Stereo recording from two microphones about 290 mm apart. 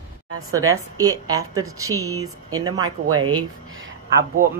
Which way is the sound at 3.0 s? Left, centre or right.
Right.